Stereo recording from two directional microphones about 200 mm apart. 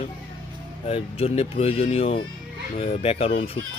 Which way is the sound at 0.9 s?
30° left (ahead or behind).